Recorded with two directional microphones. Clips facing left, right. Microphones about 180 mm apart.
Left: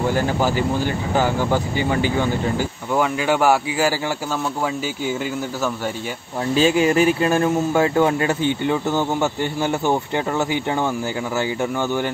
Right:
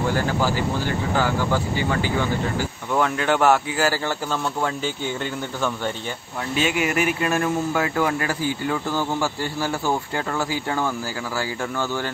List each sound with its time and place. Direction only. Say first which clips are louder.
0.1 s speech: left 3 dB; 20° left (ahead or behind)
2.9 s speech: left 1 dB; 5° left (ahead or behind)
6.5 s speech: left 6 dB; 30° left (ahead or behind)